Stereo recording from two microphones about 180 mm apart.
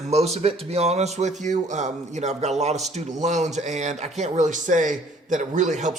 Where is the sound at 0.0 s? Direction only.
35° right (ahead or behind).